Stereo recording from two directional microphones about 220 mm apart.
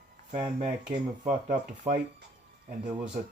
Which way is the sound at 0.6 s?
35° right (ahead or behind).